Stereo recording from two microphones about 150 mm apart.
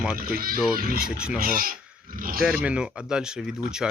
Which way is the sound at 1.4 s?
70° right (ahead or behind).